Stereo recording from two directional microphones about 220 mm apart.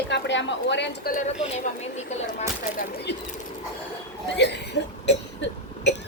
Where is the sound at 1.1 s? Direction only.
30° left (ahead or behind).